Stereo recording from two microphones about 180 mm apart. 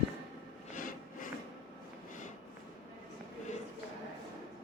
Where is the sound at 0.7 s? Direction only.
50° left (ahead or behind).